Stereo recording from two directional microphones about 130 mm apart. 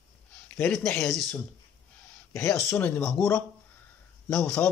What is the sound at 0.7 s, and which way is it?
Speech, 5° left (ahead or behind).